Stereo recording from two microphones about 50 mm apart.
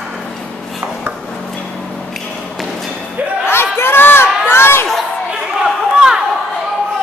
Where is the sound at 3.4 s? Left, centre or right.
Left.